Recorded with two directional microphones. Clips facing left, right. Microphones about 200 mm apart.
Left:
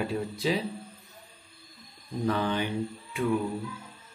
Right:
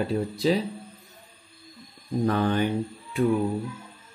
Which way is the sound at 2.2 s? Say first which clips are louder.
Right 4 dB; 50° right (ahead or behind).